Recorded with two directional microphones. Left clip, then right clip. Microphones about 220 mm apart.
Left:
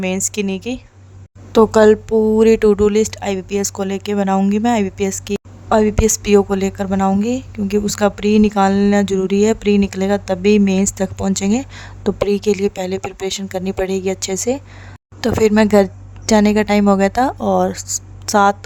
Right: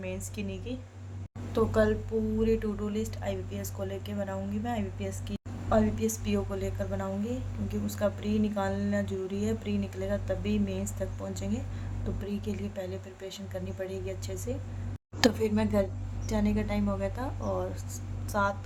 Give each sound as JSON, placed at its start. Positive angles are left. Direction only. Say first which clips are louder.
{"t": 0.0, "sound": "speech", "louder": "left 18 dB", "side_deg": 50}